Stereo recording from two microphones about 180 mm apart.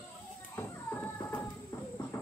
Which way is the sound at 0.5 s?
10° left (ahead or behind).